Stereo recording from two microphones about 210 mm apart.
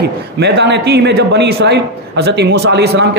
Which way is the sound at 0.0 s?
50° right (ahead or behind).